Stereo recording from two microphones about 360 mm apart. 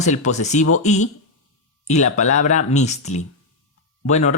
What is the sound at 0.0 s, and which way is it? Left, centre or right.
Speech, centre.